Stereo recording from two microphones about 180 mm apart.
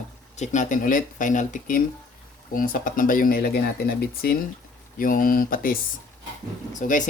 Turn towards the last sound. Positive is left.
turn(degrees=45)  # may be behind; listen again after turning